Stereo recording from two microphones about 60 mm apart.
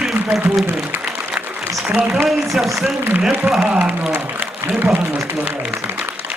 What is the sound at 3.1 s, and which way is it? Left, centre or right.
A man's voice, right.